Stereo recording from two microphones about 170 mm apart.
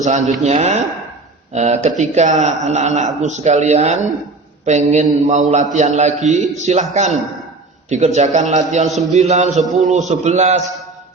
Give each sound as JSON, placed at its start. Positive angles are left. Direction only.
{"t": 0.0, "sound": "speech", "side_deg": -45}
{"t": 7.9, "sound": "speech", "side_deg": -45}
{"t": 8.9, "sound": "a man's voice", "side_deg": 0}
{"t": 9.1, "sound": "speech", "side_deg": -45}